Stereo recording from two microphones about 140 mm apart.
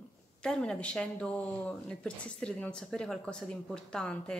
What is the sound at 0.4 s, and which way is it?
Speech, 5° left (ahead or behind).